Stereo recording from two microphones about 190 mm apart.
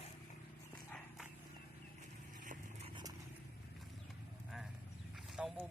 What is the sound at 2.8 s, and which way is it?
Vehicle, 25° right (ahead or behind).